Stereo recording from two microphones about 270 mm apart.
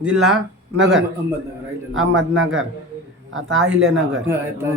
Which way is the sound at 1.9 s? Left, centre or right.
Right.